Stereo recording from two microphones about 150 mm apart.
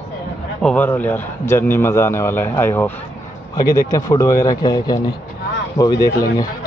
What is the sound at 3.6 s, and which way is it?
Speech, 25° left (ahead or behind).